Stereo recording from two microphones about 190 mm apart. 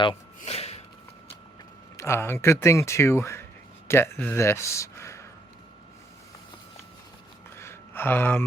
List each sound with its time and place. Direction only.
0.3 s gasp: 35° left (ahead or behind)
2.0 s speech: 15° left (ahead or behind)
7.6 s a sound: 10° left (ahead or behind)